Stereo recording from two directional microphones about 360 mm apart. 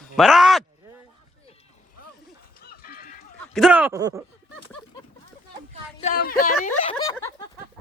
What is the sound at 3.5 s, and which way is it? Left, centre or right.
Speech, centre.